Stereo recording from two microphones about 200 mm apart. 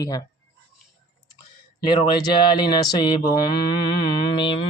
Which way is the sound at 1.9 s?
25° left (ahead or behind).